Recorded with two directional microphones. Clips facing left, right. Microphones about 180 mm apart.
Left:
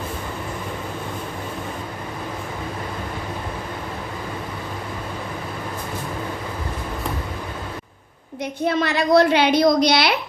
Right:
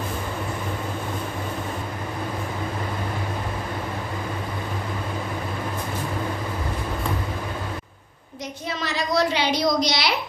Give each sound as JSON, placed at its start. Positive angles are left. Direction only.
{"t": 8.6, "sound": "a woman's voice", "side_deg": 60}